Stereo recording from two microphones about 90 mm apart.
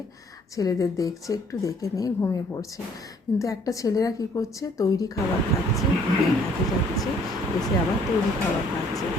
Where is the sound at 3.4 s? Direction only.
40° left (ahead or behind).